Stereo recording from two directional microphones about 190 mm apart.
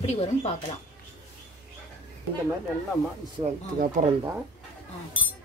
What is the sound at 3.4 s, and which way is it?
Speech, 45° right (ahead or behind).